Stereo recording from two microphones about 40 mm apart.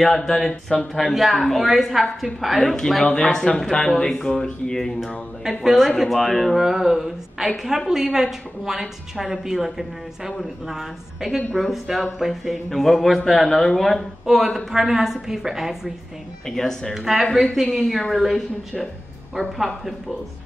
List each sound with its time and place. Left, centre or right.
0.0 s speech: centre
0.9 s a woman's voice: centre
2.6 s speech: centre
4.7 s a woman's voice: centre
5.4 s a woman's voice: centre
6.6 s a woman's voice: centre
14.2 s a woman's voice: centre
16.4 s speech: centre
16.9 s a woman's voice: centre